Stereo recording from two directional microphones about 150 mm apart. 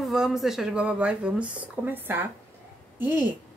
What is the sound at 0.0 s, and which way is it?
A woman's voice, 5° right (ahead or behind).